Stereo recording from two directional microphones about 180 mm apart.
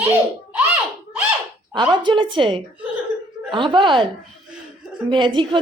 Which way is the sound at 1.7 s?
25° right (ahead or behind).